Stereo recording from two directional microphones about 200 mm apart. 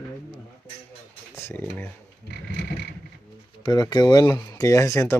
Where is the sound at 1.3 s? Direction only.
10° left (ahead or behind).